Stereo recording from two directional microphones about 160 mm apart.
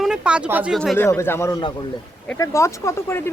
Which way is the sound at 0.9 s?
15° left (ahead or behind).